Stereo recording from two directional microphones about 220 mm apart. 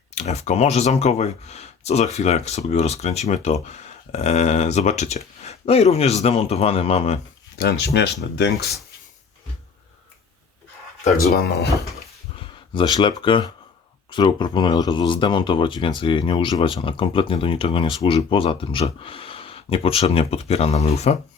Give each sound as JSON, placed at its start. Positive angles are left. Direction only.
{"t": 0.1, "sound": "speech", "side_deg": 30}
{"t": 7.6, "sound": "speech", "side_deg": 50}
{"t": 11.2, "sound": "speech", "side_deg": 45}
{"t": 12.4, "sound": "speech", "side_deg": 20}